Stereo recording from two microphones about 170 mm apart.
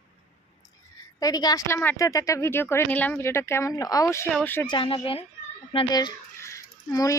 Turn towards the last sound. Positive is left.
turn(degrees=20)  # may be behind; listen again after turning